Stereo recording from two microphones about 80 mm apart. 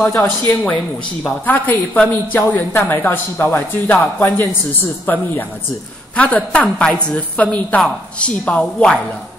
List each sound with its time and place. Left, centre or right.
0.0 s a woman's voice: left